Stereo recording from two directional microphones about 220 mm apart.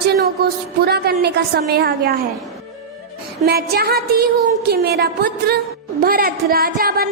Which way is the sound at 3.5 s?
45° right (ahead or behind).